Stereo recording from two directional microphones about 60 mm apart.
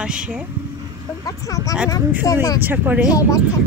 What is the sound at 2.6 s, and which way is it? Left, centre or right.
Speech, right.